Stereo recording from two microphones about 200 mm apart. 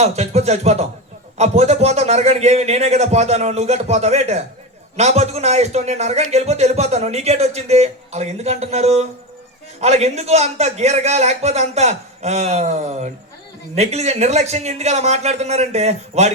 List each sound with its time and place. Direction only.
0.0 s a man's voice: 35° right (ahead or behind)